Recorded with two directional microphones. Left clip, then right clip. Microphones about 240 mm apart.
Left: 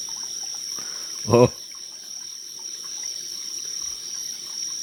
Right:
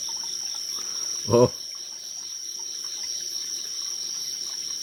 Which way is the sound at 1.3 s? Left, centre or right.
Left.